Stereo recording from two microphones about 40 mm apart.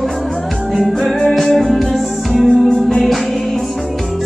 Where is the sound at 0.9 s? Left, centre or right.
Centre.